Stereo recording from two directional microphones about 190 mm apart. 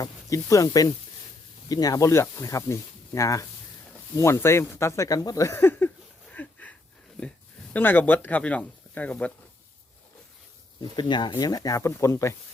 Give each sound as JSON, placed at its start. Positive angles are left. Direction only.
{"t": 0.0, "sound": "speech", "side_deg": 15}
{"t": 6.3, "sound": "a sound", "side_deg": 5}
{"t": 7.7, "sound": "speech", "side_deg": 10}
{"t": 10.9, "sound": "speech", "side_deg": 25}